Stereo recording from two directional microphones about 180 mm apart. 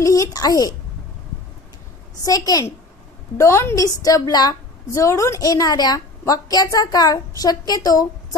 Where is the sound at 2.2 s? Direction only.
20° left (ahead or behind).